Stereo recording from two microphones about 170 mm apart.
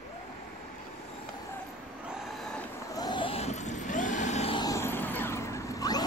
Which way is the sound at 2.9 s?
25° left (ahead or behind).